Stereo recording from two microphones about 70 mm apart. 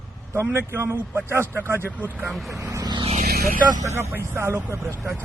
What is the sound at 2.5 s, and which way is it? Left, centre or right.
Speech, right.